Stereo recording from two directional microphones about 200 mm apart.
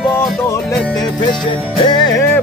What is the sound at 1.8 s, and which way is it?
Music, 20° left (ahead or behind).